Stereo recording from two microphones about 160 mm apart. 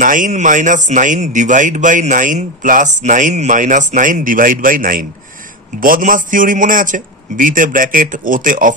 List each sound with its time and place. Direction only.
0.0 s a man's voice: 55° right (ahead or behind)